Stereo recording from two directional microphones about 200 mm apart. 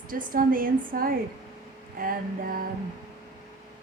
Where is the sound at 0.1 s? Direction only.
45° right (ahead or behind).